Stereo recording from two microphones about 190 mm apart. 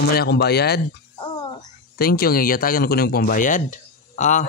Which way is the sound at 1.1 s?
25° left (ahead or behind).